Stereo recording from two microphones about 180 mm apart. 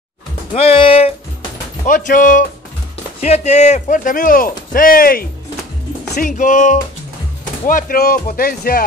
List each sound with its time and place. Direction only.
0.6 s music: 30° left (ahead or behind)
1.9 s speech: 45° left (ahead or behind)